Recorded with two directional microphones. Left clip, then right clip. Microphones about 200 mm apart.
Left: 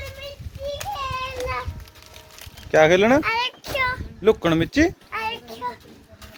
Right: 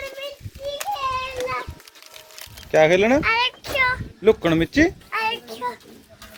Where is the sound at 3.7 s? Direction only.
15° left (ahead or behind).